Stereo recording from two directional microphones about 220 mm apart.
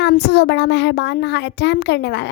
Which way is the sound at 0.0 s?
50° left (ahead or behind).